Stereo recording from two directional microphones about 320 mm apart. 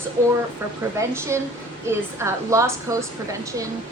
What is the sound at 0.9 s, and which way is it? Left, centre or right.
A woman's voice, centre.